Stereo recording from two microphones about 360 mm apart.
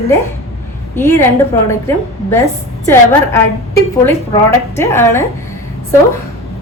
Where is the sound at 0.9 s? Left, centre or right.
Centre.